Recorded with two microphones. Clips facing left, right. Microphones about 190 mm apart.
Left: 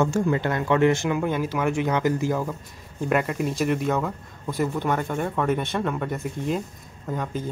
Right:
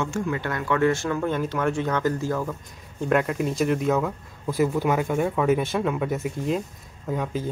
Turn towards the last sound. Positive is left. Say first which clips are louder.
# right 2 dB
turn(degrees=0)  # may be behind; listen again after turning